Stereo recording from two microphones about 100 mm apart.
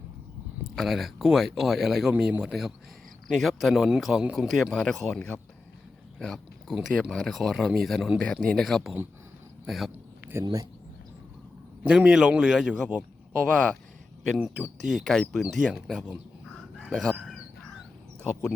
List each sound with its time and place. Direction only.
0.8 s speech: centre (ahead or behind)
10.4 s speech: 40° right (ahead or behind)
11.8 s a man's voice: 10° right (ahead or behind)
13.4 s speech: 10° left (ahead or behind)
14.4 s speech: 5° right (ahead or behind)
16.9 s speech: 10° left (ahead or behind)